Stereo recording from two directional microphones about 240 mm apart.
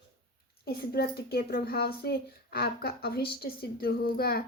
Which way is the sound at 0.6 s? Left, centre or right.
Left.